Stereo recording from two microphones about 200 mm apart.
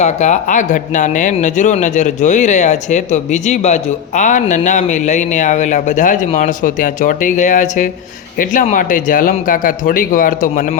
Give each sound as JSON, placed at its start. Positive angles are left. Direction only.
{"t": 0.0, "sound": "speech", "side_deg": 35}